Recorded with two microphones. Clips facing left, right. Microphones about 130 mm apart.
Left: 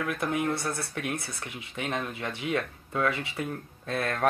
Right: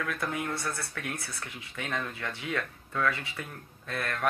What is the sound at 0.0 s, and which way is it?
A man's voice, 15° left (ahead or behind).